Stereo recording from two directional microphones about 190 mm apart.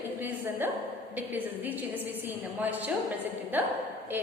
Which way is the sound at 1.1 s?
10° right (ahead or behind).